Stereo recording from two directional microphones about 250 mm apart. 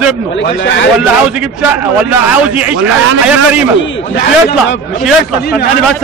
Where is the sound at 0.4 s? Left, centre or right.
Left.